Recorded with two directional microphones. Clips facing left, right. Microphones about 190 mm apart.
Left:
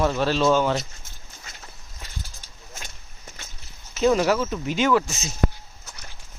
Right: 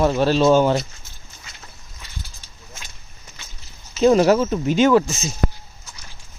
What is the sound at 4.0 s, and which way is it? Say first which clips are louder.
Speech: right 5 dB; 30° right (ahead or behind).